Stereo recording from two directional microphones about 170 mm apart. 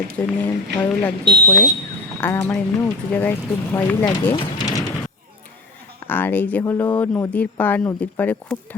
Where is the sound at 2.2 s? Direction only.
15° left (ahead or behind).